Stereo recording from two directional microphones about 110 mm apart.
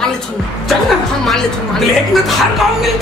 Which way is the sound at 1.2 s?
Centre (ahead or behind).